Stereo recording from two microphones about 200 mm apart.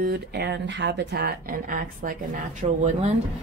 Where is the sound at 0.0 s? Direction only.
50° right (ahead or behind).